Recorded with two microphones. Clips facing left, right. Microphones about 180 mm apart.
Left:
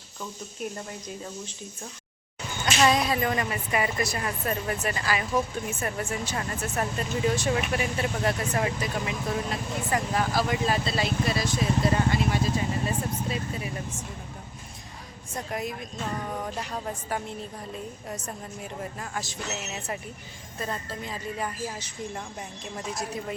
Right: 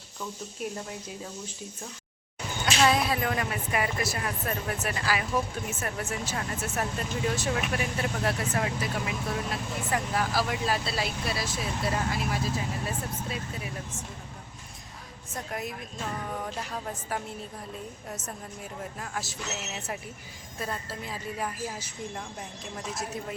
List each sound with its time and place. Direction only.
0.6 s speech: centre (ahead or behind)
2.6 s speech: centre (ahead or behind)
15.4 s speech: centre (ahead or behind)